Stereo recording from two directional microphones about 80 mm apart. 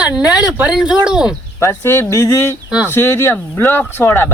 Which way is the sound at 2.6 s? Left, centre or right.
Centre.